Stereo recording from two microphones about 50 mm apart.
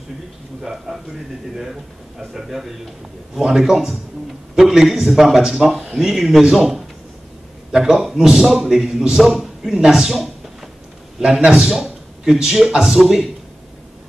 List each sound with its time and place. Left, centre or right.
0.6 s a man's voice: centre